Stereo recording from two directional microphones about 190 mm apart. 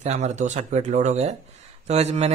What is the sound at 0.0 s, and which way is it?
Speech, 35° right (ahead or behind).